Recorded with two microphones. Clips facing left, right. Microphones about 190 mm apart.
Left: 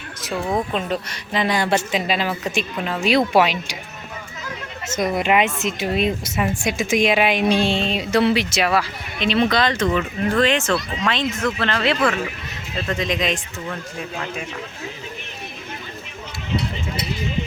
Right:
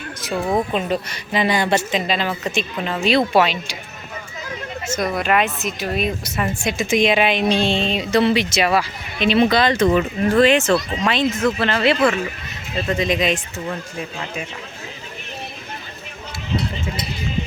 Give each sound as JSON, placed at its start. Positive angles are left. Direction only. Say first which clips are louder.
{"t": 0.3, "sound": "speech", "louder": "right 2 dB", "side_deg": -15}
{"t": 0.7, "sound": "a woman's voice", "louder": "right 2 dB", "side_deg": -5}
{"t": 4.9, "sound": "speech", "louder": "left 1 dB", "side_deg": 20}
{"t": 6.3, "sound": "a woman's voice", "louder": "left 1 dB", "side_deg": 15}